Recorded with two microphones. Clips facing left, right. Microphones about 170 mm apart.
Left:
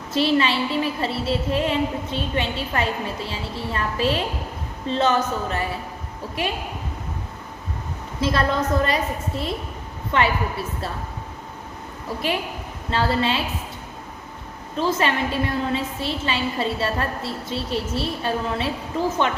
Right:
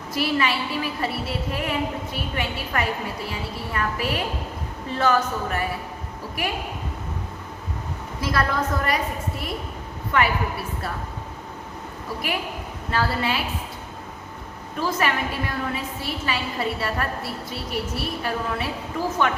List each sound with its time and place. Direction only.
0.1 s a woman's voice: 25° left (ahead or behind)
8.2 s a woman's voice: 25° left (ahead or behind)
12.9 s a woman's voice: 25° left (ahead or behind)
14.8 s a woman's voice: 25° left (ahead or behind)